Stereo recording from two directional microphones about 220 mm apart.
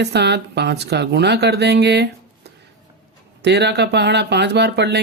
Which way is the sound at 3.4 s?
50° right (ahead or behind).